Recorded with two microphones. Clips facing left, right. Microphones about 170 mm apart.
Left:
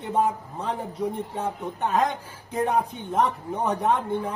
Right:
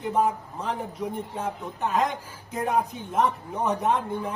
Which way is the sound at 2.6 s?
35° left (ahead or behind).